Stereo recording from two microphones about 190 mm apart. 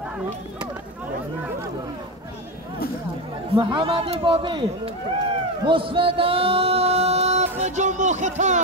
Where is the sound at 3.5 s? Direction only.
25° right (ahead or behind).